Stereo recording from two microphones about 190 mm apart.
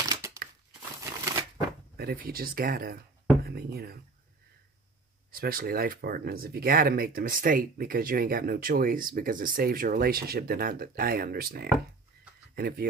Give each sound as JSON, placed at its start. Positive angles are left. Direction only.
{"t": 0.1, "sound": "crumpling", "side_deg": -15}
{"t": 2.0, "sound": "speech", "side_deg": -50}
{"t": 5.3, "sound": "speech", "side_deg": -50}